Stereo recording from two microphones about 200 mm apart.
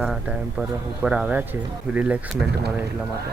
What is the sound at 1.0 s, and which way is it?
Speech, 5° right (ahead or behind).